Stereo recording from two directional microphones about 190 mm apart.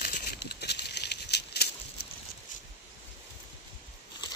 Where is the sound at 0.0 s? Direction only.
50° left (ahead or behind).